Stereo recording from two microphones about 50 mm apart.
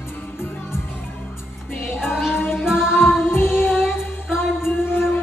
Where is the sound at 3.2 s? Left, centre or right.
Left.